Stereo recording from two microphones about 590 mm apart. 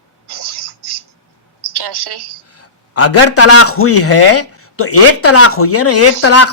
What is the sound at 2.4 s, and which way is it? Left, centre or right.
A man's voice, left.